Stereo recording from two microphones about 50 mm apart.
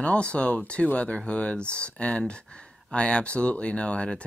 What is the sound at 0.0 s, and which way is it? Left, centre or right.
Speech, left.